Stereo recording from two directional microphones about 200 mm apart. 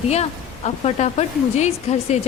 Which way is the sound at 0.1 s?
30° left (ahead or behind).